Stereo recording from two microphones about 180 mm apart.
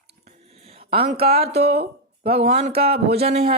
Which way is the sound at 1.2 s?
35° right (ahead or behind).